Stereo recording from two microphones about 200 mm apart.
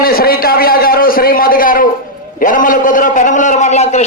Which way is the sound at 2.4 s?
40° left (ahead or behind).